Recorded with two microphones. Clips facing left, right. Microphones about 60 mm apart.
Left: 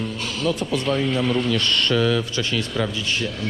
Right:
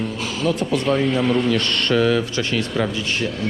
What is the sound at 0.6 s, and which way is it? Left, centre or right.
Speech, right.